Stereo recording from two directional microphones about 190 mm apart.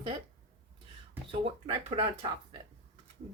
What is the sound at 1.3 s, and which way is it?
A woman's voice, 30° right (ahead or behind).